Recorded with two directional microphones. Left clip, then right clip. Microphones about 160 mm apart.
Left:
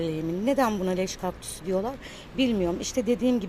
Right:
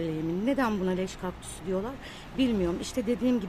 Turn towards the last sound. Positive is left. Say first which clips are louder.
# left 3 dB
turn(degrees=10)  # may be behind; listen again after turning